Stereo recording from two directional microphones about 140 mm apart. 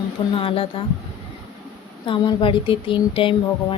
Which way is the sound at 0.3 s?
40° left (ahead or behind).